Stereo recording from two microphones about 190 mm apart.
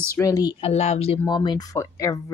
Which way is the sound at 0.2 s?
20° left (ahead or behind).